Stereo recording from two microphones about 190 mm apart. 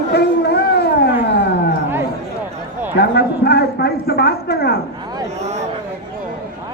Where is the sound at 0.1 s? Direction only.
60° left (ahead or behind).